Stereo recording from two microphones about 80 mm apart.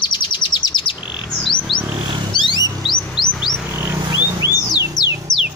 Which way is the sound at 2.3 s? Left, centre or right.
Left.